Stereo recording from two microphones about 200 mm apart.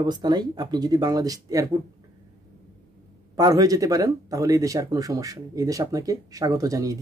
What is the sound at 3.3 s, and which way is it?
Speech, 15° right (ahead or behind).